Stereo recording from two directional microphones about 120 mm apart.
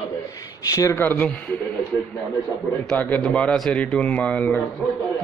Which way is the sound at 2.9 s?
10° left (ahead or behind).